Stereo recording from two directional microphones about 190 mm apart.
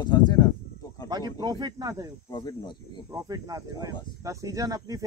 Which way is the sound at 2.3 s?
20° left (ahead or behind).